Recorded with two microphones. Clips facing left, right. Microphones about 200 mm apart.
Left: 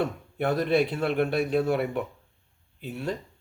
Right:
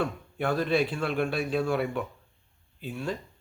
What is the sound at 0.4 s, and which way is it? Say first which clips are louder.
Speech: left 2 dB; 20° left (ahead or behind).